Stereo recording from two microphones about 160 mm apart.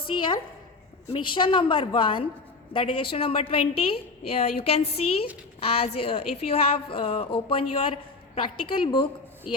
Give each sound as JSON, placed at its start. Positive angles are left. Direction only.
{"t": 1.1, "sound": "a woman's voice", "side_deg": 30}